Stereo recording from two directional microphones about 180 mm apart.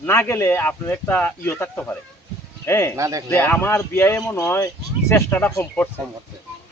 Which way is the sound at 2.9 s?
20° right (ahead or behind).